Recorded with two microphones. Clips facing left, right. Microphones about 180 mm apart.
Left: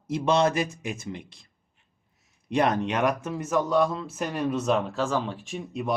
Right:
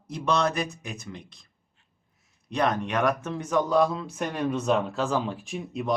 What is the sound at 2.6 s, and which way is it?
Speech, 25° left (ahead or behind).